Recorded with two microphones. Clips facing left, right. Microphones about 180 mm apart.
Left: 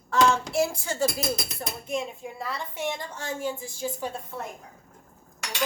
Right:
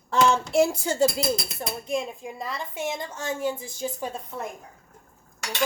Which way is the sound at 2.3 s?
20° right (ahead or behind).